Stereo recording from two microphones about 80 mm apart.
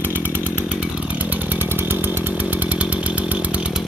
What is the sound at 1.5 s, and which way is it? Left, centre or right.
Chainsaw, right.